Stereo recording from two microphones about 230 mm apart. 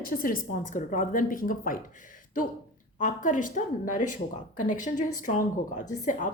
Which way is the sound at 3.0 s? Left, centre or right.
Left.